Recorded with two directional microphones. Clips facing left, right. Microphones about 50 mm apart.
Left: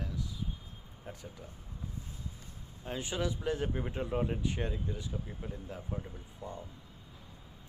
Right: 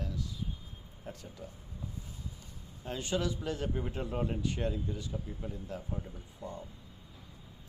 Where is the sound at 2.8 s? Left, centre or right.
Centre.